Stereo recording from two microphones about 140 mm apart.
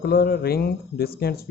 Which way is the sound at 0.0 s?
90° left.